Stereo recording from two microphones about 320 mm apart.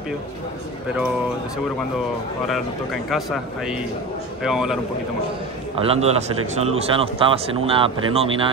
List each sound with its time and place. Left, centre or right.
3.1 s speech: centre
5.8 s a man's voice: centre